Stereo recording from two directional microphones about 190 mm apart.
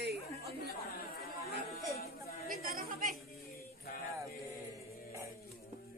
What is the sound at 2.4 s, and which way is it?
Speech, 50° right (ahead or behind).